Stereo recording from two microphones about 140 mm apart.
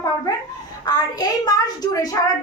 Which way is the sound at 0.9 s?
30° left (ahead or behind).